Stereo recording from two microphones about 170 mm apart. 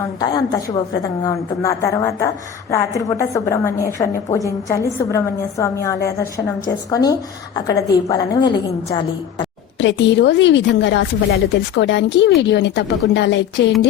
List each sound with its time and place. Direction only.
0.2 s a woman's voice: 20° left (ahead or behind)
9.7 s a woman's voice: 90° left